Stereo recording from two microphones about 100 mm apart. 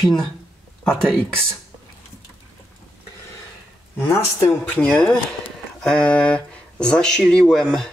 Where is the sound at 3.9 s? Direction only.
25° left (ahead or behind).